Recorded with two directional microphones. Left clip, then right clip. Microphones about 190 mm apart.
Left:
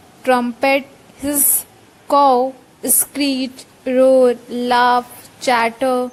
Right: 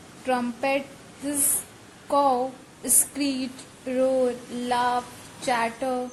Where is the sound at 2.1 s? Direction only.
40° left (ahead or behind).